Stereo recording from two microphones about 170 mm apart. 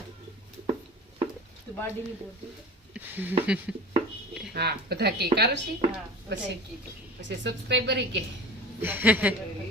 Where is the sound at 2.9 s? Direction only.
10° right (ahead or behind).